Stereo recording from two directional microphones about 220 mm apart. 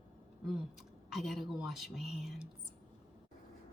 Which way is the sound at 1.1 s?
Centre (ahead or behind).